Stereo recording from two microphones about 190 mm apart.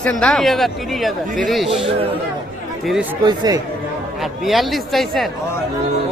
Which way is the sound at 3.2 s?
20° right (ahead or behind).